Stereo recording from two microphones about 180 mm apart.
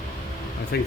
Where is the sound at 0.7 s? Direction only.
65° left (ahead or behind).